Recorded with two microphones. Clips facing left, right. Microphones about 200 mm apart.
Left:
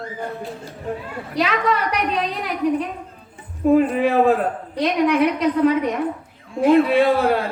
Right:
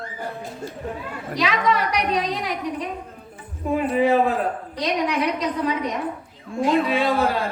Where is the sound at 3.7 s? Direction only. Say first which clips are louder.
Left 3 dB; 55° left (ahead or behind).